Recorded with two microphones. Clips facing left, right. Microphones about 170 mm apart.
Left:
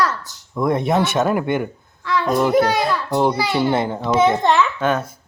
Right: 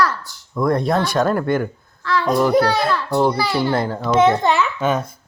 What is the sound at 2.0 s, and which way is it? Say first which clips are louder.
A child's voice: right 1 dB; 15° left (ahead or behind).